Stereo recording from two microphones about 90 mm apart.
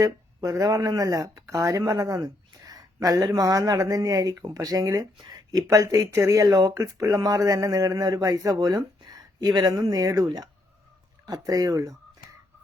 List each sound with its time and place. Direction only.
0.0 s speech: 40° right (ahead or behind)